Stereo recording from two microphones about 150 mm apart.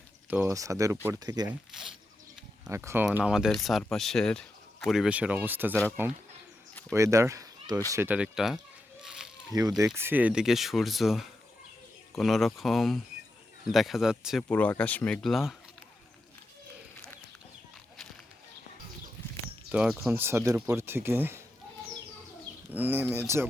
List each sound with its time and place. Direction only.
0.3 s speech: 10° right (ahead or behind)
0.5 s speech: 20° right (ahead or behind)
2.6 s speech: 20° right (ahead or behind)
3.2 s speech: 5° right (ahead or behind); by 7.8 s 20° right (ahead or behind)
7.9 s speech: 10° right (ahead or behind)
9.0 s a sound: 5° right (ahead or behind)
9.5 s speech: 25° right (ahead or behind); by 14.4 s 5° right (ahead or behind)
14.5 s speech: 10° left (ahead or behind)
19.7 s speech: 5° right (ahead or behind)
22.7 s speech: 10° right (ahead or behind)